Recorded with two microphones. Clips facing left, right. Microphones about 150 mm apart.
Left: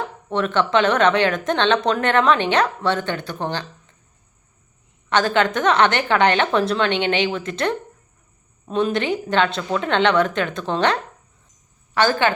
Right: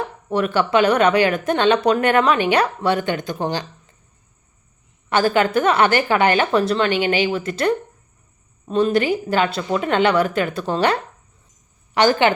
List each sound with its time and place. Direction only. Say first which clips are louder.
0.3 s speech: right 1 dB; 10° right (ahead or behind)
5.0 s a woman's voice: right 1 dB; 5° right (ahead or behind)
11.9 s speech: right 3 dB; 15° right (ahead or behind)